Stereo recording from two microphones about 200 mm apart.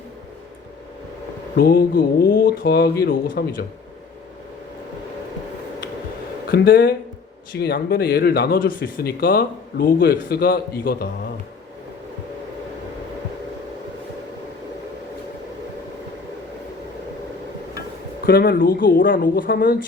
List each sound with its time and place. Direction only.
1.5 s speech: 50° left (ahead or behind)
6.5 s speech: 45° left (ahead or behind)
18.3 s speech: 45° left (ahead or behind)